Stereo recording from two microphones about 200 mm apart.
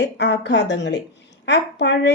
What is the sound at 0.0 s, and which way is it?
A woman's voice, 60° left (ahead or behind).